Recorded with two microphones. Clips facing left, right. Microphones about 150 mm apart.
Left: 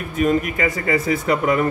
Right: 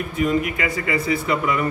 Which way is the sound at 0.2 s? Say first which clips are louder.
Left 3 dB; 45° left (ahead or behind).